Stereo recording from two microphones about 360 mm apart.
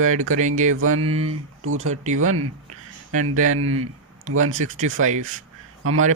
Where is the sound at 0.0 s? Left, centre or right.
Right.